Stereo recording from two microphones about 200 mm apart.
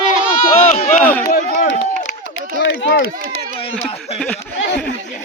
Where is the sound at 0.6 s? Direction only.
40° left (ahead or behind).